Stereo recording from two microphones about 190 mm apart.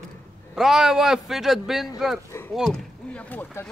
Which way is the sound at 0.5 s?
Centre (ahead or behind).